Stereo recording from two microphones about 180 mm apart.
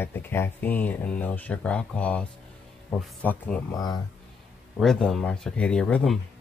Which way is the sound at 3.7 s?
20° left (ahead or behind).